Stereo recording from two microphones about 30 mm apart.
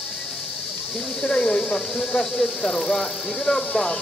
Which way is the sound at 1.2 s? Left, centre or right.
Left.